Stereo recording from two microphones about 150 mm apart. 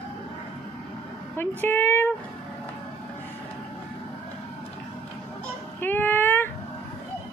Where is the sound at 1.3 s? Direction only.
15° left (ahead or behind).